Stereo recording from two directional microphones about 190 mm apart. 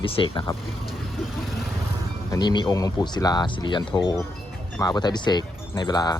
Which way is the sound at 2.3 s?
20° left (ahead or behind).